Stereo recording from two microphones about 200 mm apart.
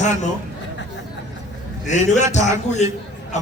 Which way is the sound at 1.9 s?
35° left (ahead or behind).